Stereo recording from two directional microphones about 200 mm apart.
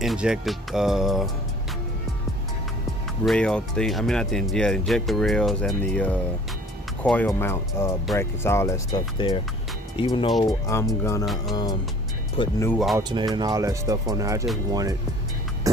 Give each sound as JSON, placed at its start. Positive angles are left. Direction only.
{"t": 0.0, "sound": "speech", "side_deg": 0}
{"t": 3.2, "sound": "speech", "side_deg": 5}
{"t": 13.0, "sound": "speech", "side_deg": -20}
{"t": 15.7, "sound": "music", "side_deg": -15}